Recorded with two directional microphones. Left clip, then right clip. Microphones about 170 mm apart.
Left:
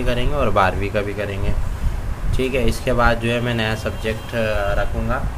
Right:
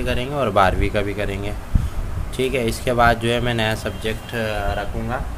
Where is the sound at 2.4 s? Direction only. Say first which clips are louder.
Even; 25° right (ahead or behind).